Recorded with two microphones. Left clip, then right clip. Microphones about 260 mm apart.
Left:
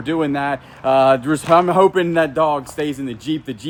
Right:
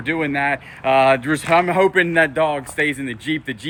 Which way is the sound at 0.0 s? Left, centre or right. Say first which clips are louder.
Even; centre.